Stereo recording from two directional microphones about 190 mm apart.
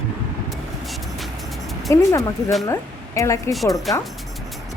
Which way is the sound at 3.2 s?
15° left (ahead or behind).